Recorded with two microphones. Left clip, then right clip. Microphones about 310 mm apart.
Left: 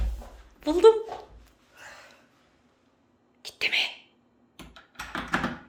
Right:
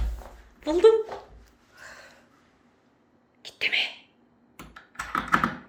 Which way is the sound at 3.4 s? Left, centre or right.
Centre.